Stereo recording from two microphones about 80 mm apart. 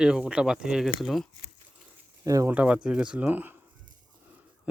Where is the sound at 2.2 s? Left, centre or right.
Right.